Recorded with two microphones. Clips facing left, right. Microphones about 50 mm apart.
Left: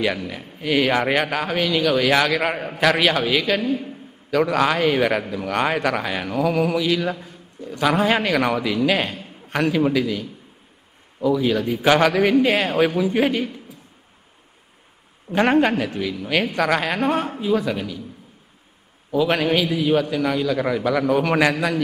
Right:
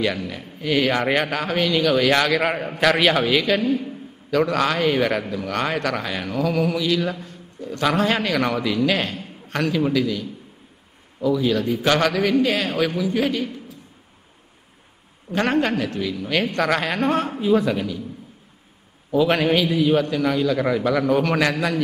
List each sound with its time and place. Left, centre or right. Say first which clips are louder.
0.0 s a man's voice: even; centre
3.6 s a man's voice: right 2 dB; left
4.3 s a man's voice: left 1 dB; centre; by 13.5 s left
15.3 s a man's voice: left 3 dB; centre
19.1 s a man's voice: right 1 dB; centre